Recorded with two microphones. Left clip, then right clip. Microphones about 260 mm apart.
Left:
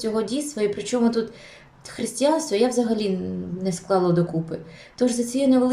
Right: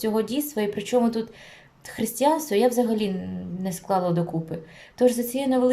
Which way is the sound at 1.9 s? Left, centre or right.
Right.